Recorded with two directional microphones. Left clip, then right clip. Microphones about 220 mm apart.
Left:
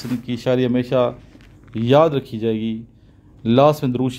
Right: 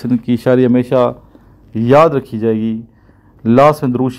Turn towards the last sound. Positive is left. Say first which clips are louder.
# right 5 dB
turn(degrees=-15)  # may be behind; listen again after turning